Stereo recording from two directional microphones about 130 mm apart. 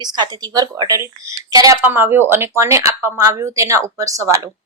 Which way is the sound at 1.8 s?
15° right (ahead or behind).